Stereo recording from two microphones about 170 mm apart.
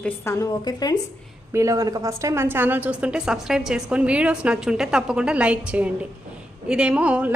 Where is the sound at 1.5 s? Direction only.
20° right (ahead or behind).